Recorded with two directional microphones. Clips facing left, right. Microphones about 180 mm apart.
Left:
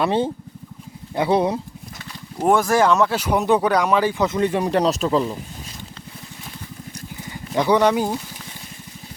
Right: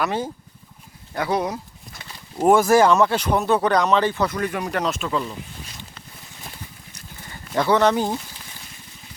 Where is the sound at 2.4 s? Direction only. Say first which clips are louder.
Right 2 dB; 5° right (ahead or behind); by 5.4 s 35° left (ahead or behind).